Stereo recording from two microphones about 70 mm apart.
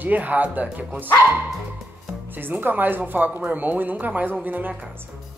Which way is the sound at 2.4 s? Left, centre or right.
Right.